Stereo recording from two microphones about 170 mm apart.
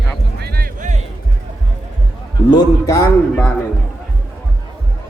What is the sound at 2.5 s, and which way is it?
Speech, 20° left (ahead or behind).